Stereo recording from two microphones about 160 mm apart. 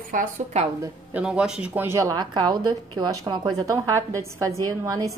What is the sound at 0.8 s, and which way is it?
A woman's voice, 10° right (ahead or behind).